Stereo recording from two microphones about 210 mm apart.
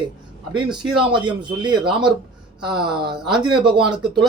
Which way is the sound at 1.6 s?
20° right (ahead or behind).